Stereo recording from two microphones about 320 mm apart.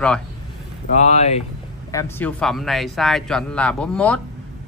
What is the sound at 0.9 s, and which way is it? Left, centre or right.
Speech, left.